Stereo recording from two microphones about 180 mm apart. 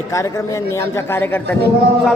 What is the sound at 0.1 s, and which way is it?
A man's voice, 15° left (ahead or behind).